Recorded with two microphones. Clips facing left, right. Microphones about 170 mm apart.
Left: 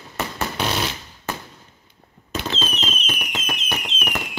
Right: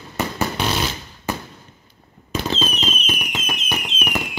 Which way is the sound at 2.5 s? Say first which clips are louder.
Right 3 dB; 5° right (ahead or behind).